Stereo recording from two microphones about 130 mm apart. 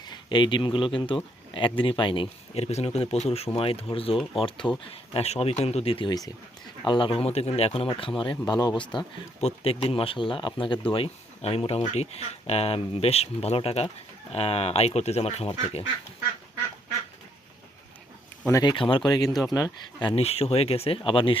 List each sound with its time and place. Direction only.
0.0 s speech: 35° left (ahead or behind)
5.1 s speech: 55° left (ahead or behind)
6.1 s speech: 30° left (ahead or behind)
6.8 s speech: 40° left (ahead or behind)
9.4 s speech: 50° left (ahead or behind)
18.6 s speech: 40° left (ahead or behind)
20.2 s speech: 50° left (ahead or behind)